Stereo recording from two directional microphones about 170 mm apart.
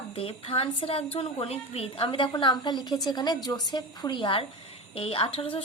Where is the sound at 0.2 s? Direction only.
35° left (ahead or behind).